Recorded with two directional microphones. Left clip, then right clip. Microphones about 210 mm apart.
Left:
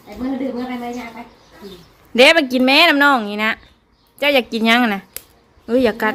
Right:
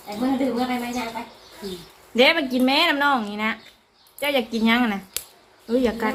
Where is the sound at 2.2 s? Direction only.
50° left (ahead or behind).